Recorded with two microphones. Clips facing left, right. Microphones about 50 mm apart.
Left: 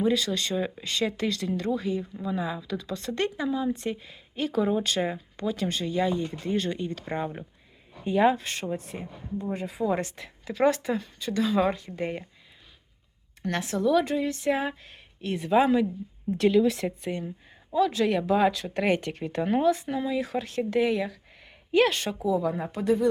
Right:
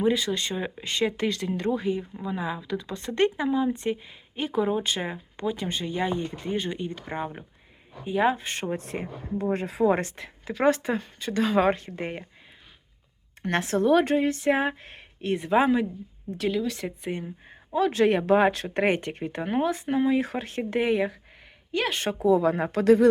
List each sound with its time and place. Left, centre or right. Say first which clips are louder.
0.0 s speech: right 1 dB; right
2.0 s speech: left 1 dB; centre
8.4 s speech: right 2 dB; right
8.7 s speech: right 3 dB; right
9.6 s speech: right 4 dB; right
10.2 s a woman's voice: left 2 dB; right
11.9 s speech: left 2 dB; centre
13.4 s a woman's voice: right 3 dB; right
16.4 s a woman's voice: left 5 dB; centre
17.0 s speech: even; centre
17.5 s a woman's voice: even; right; by 19.7 s centre
19.7 s a woman's voice: right 5 dB; right
21.9 s speech: right 5 dB; right